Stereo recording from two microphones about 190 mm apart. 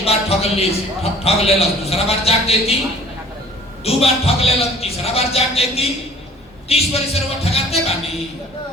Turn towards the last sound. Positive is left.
turn(degrees=30)  # may be behind; listen again after turning